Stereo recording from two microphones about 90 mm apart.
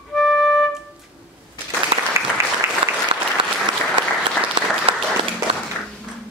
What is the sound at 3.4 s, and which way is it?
Applause, 75° right (ahead or behind).